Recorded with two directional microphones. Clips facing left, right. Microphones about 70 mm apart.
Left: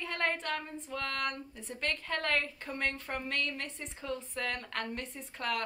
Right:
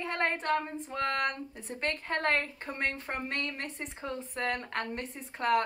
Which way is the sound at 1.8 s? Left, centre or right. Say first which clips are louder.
Right 4 dB; right.